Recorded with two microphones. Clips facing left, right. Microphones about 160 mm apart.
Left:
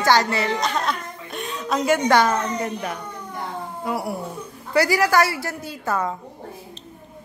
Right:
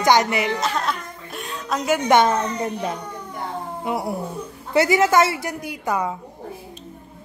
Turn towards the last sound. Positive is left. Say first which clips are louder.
# right 1 dB
turn(degrees=-15)  # may be behind; listen again after turning